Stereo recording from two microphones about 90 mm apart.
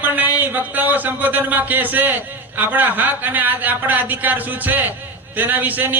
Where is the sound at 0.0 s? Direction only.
20° right (ahead or behind).